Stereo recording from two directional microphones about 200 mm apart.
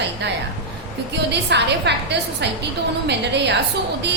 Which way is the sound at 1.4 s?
60° right (ahead or behind).